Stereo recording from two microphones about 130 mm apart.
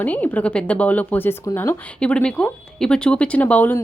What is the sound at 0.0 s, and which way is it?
A woman's voice, 15° left (ahead or behind).